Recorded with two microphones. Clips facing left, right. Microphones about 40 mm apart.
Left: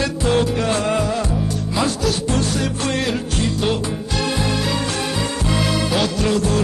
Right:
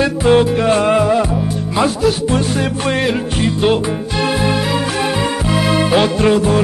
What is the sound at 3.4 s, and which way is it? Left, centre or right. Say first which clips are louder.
Music: right 7 dB; right.